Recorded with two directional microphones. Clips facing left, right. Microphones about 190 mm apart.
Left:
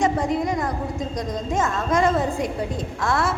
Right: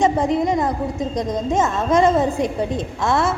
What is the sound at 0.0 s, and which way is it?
A woman's voice, 20° right (ahead or behind).